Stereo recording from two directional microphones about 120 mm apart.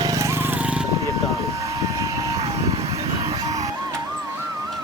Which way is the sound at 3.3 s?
30° right (ahead or behind).